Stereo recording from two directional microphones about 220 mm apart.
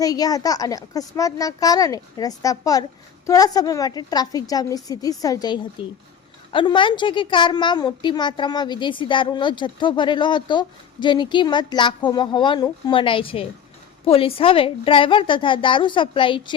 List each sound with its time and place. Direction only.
0.0 s a woman's voice: 15° left (ahead or behind)